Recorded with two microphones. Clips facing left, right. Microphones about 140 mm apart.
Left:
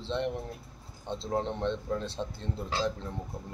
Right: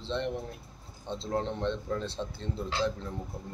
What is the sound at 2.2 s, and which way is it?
Speech, 20° left (ahead or behind).